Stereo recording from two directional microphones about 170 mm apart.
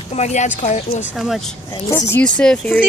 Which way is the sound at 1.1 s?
Centre (ahead or behind).